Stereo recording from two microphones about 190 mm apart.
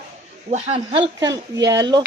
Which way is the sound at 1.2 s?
20° right (ahead or behind).